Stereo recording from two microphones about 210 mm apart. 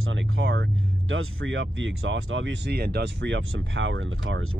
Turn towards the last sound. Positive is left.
turn(degrees=-65)  # may be behind; listen again after turning